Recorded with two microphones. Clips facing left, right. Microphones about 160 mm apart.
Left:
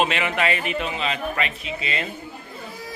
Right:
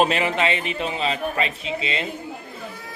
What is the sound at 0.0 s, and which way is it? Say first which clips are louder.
A man's voice: right 2 dB; 35° right (ahead or behind).